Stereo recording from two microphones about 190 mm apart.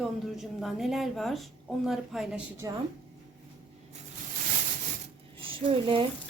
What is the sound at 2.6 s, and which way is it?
Speech, 15° right (ahead or behind).